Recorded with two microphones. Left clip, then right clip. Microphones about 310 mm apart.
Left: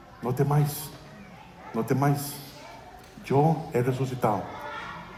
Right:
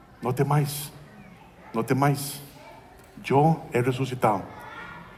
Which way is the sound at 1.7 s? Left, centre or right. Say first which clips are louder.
Right 2 dB; right.